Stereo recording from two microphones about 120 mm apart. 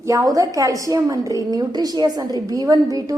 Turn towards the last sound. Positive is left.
turn(degrees=-30)  # may be behind; listen again after turning